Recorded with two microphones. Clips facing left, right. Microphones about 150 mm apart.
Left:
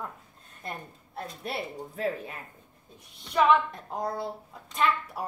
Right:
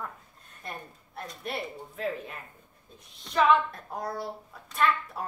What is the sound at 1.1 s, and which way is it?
Speech, 30° left (ahead or behind).